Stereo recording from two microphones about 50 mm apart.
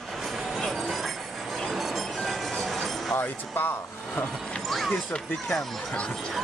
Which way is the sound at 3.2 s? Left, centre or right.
Left.